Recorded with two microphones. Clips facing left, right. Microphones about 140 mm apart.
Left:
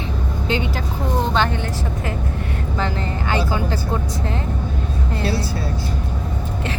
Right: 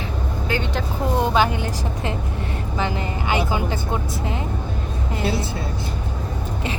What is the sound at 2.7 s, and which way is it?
A woman's voice, 15° right (ahead or behind).